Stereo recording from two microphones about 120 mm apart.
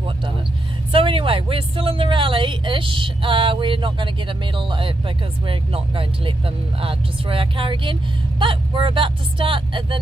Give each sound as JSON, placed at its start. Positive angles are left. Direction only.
{"t": 0.9, "sound": "speech", "side_deg": -50}